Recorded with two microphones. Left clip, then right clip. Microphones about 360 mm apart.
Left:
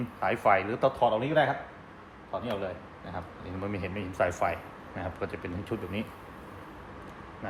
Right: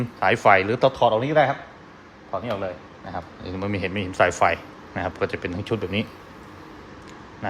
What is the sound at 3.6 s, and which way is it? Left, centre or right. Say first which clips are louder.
A man's voice: right 8 dB; right.